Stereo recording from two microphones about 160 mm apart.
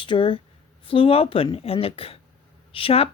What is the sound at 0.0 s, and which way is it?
Speech, 30° left (ahead or behind).